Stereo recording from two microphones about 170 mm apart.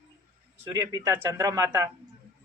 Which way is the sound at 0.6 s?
20° right (ahead or behind).